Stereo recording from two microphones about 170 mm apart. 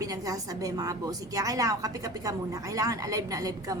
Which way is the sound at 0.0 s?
20° right (ahead or behind).